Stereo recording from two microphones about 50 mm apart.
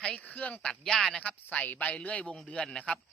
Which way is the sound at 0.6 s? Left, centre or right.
Centre.